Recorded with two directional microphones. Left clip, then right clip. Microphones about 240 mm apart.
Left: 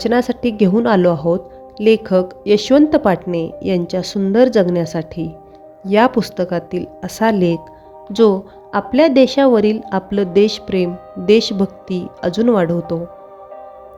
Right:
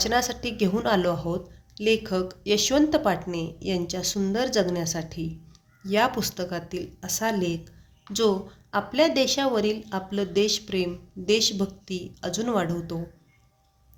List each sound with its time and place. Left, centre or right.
0.0 s a woman's voice: left